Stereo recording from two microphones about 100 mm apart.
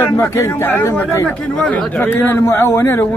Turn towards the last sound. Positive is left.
turn(degrees=25)  # may be behind; listen again after turning